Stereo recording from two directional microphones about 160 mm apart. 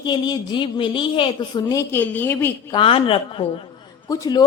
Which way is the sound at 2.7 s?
35° left (ahead or behind).